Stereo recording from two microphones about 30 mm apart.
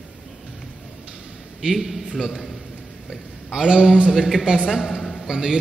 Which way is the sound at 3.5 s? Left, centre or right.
Right.